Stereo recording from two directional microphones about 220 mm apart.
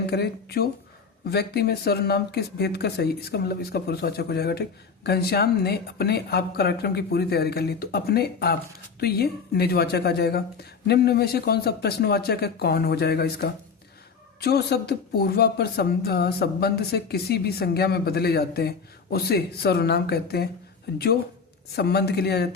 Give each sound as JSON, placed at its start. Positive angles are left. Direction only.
{"t": 0.1, "sound": "speech", "side_deg": 45}
{"t": 21.8, "sound": "speech", "side_deg": 45}